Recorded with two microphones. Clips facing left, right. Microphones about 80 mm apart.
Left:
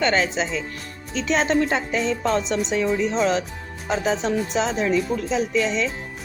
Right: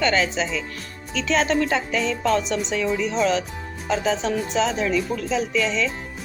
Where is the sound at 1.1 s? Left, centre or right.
Left.